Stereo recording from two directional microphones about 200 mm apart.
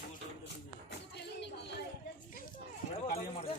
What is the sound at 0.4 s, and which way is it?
Music, 60° left (ahead or behind).